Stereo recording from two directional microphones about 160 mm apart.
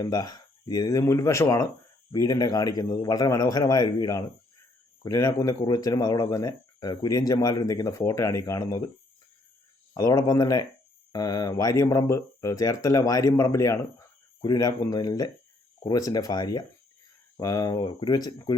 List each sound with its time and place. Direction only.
0.0 s speech: 25° left (ahead or behind)
9.9 s speech: 20° left (ahead or behind)